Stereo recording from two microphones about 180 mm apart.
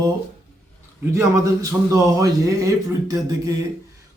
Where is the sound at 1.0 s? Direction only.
15° right (ahead or behind).